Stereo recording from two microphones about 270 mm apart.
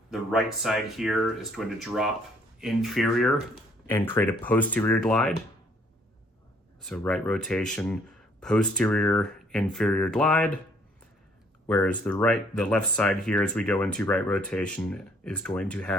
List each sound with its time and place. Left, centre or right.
0.1 s speech: centre
6.8 s speech: centre
11.7 s speech: centre